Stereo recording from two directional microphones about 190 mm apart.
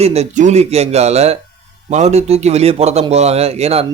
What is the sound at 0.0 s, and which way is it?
A man's voice, 35° right (ahead or behind).